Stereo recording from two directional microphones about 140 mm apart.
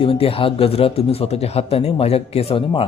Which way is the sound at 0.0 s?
40° left (ahead or behind).